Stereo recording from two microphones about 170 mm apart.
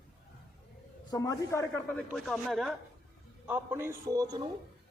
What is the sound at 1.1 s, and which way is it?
Speech, 20° left (ahead or behind).